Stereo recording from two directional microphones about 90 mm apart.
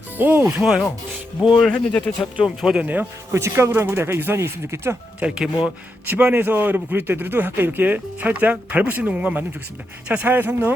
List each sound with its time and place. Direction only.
0.2 s a man's voice: 20° right (ahead or behind)
0.4 s speech: 5° right (ahead or behind)
1.6 s speech: 10° left (ahead or behind)
2.4 s speech: 5° right (ahead or behind)
2.8 s speech: 15° right (ahead or behind)
3.3 s a man's voice: 30° right (ahead or behind)
5.2 s a man's voice: 10° right (ahead or behind)